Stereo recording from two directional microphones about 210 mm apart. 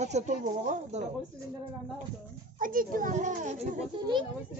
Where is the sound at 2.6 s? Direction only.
40° right (ahead or behind).